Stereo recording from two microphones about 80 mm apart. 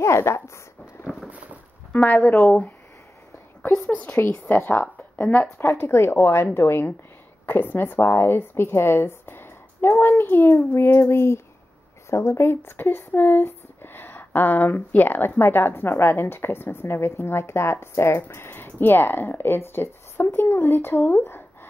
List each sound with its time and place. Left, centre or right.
0.0 s speech: left
1.0 s a sound: centre
2.0 s speech: left
3.9 s speech: left